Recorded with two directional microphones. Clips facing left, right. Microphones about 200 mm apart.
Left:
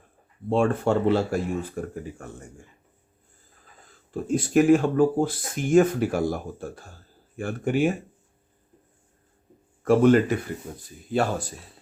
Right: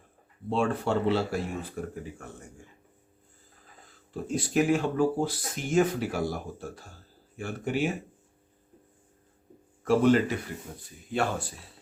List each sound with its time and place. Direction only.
0.5 s speech: 50° left (ahead or behind)
4.1 s speech: 50° left (ahead or behind)
9.8 s speech: 50° left (ahead or behind)
11.1 s speech: 40° left (ahead or behind)